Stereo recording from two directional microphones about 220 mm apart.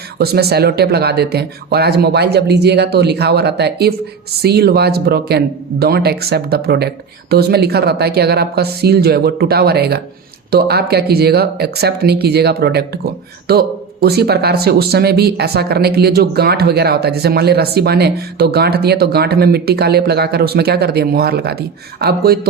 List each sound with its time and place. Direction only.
0.2 s speech: 45° right (ahead or behind)